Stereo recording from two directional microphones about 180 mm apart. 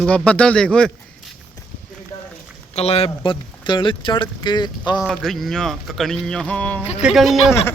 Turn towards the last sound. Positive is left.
turn(degrees=0)  # may be behind; listen again after turning